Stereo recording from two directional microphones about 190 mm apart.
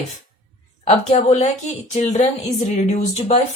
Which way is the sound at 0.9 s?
35° left (ahead or behind).